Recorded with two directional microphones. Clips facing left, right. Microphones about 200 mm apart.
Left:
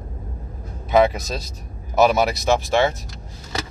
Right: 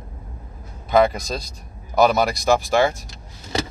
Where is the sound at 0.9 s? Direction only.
5° left (ahead or behind).